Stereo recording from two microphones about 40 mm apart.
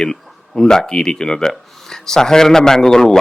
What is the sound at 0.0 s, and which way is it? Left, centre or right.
A man's voice, centre.